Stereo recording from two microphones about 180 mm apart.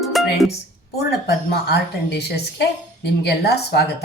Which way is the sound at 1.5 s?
65° left (ahead or behind).